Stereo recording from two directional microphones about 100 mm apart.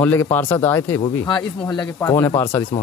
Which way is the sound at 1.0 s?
55° left (ahead or behind).